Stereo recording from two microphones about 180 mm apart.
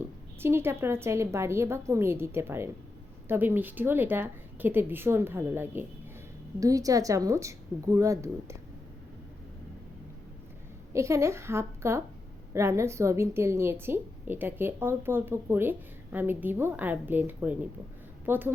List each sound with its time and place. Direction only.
0.3 s a woman's voice: 15° right (ahead or behind)
10.9 s a woman's voice: 15° right (ahead or behind)